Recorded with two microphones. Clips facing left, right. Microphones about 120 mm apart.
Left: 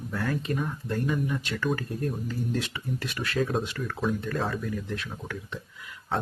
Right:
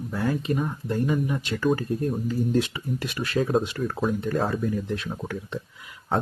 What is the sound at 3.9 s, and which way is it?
Speech, 40° right (ahead or behind).